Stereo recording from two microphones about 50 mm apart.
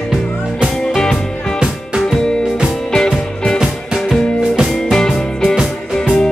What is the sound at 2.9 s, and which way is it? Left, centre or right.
Music, centre.